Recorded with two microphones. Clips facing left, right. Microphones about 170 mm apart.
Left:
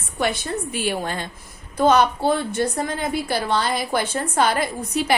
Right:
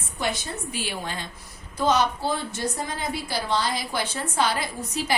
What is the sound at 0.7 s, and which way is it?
A woman's voice, 50° left (ahead or behind).